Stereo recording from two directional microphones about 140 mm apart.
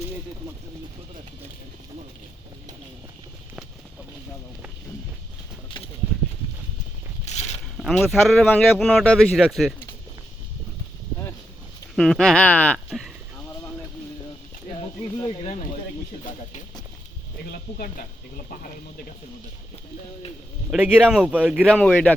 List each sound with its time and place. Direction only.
7.3 s a sound: 55° left (ahead or behind)
7.8 s speech: centre (ahead or behind)
11.9 s speech: 5° left (ahead or behind)
17.7 s speech: 50° left (ahead or behind)
20.7 s speech: 5° right (ahead or behind)
21.6 s speech: 5° left (ahead or behind)